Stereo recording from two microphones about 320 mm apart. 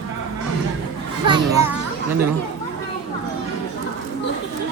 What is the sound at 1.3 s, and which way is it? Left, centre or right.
Children playing, centre.